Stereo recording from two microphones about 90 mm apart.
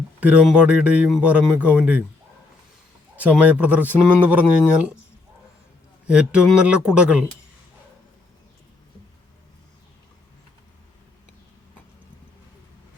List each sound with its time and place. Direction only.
0.2 s speech: 15° right (ahead or behind)
3.2 s speech: 15° right (ahead or behind)
6.1 s speech: 10° right (ahead or behind)